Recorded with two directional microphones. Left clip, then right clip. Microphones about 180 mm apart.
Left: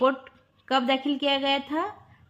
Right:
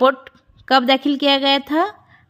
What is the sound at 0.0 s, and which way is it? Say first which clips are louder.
A woman's voice: right 8 dB; 40° right (ahead or behind).